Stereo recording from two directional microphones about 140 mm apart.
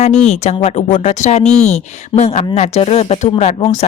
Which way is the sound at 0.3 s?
55° left (ahead or behind).